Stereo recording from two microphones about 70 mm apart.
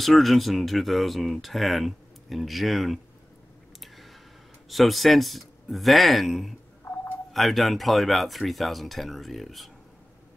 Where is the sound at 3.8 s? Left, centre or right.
Centre.